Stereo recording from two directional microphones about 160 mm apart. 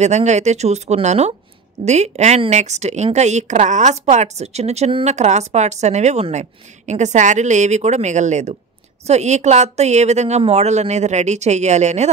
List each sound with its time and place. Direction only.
0.0 s speech: 45° right (ahead or behind)